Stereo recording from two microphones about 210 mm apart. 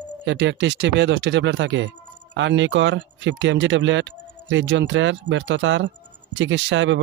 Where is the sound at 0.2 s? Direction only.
60° right (ahead or behind).